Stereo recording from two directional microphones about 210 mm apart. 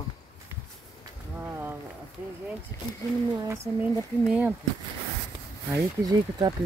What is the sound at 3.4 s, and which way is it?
Speech, 10° right (ahead or behind).